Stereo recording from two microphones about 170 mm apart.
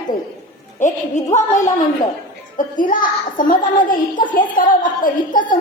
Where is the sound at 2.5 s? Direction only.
50° left (ahead or behind).